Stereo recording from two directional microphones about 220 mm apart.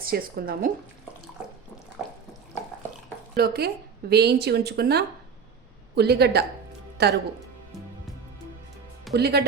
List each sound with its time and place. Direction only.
0.0 s speech: 40° right (ahead or behind)
2.0 s water: centre (ahead or behind)
3.3 s speech: 45° right (ahead or behind)
9.1 s speech: 45° right (ahead or behind)